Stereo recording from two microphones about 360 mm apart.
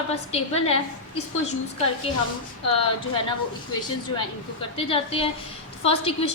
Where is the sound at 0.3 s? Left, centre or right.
Centre.